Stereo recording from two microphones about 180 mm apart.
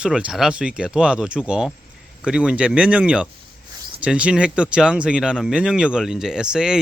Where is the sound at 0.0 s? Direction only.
5° right (ahead or behind).